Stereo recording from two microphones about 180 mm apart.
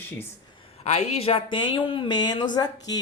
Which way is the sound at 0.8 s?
35° left (ahead or behind).